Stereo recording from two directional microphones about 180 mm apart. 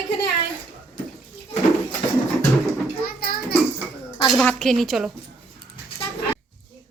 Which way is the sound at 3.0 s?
55° left (ahead or behind).